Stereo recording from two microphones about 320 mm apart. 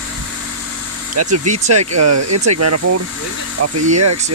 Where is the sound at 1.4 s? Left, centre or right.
Right.